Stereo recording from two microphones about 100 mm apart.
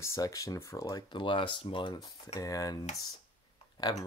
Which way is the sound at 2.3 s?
35° left (ahead or behind).